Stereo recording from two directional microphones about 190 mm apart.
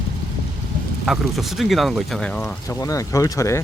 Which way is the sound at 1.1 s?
Centre (ahead or behind).